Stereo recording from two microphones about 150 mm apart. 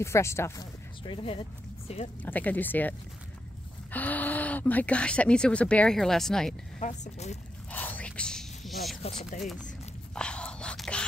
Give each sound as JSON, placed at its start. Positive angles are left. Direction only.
{"t": 0.0, "sound": "speech", "side_deg": 20}
{"t": 1.0, "sound": "speech", "side_deg": 35}
{"t": 2.2, "sound": "speech", "side_deg": 10}
{"t": 6.8, "sound": "speech", "side_deg": 50}
{"t": 7.7, "sound": "whispering", "side_deg": 10}
{"t": 10.1, "sound": "whispering", "side_deg": 5}